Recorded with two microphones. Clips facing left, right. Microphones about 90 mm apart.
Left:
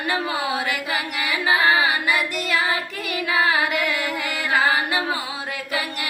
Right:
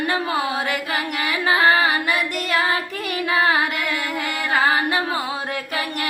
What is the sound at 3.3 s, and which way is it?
Carnatic music, 35° right (ahead or behind).